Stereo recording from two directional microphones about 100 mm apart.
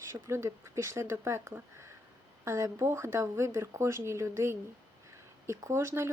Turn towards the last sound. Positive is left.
turn(degrees=-25)  # may be behind; listen again after turning